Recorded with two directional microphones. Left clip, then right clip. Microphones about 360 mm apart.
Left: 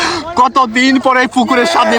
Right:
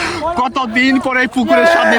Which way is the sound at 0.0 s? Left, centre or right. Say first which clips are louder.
Left 4 dB; centre.